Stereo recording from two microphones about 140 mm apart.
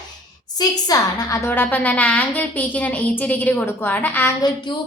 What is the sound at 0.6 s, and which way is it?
A woman's voice, 25° left (ahead or behind).